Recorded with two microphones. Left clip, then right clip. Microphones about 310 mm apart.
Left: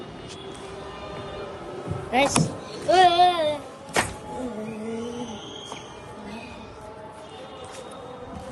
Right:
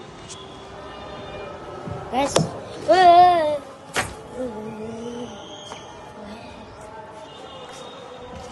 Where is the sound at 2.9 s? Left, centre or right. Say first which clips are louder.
Right 5 dB; right.